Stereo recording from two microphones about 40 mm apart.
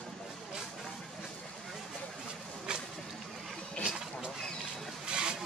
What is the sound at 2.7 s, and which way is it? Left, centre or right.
Vehicle, right.